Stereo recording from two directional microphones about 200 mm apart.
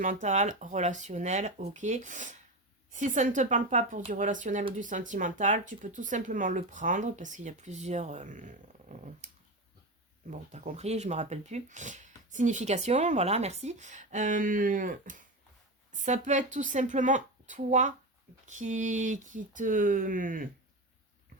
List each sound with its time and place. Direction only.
0.0 s speech: 40° right (ahead or behind)